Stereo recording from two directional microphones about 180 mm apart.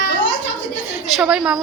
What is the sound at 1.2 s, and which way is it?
Speech, 5° right (ahead or behind).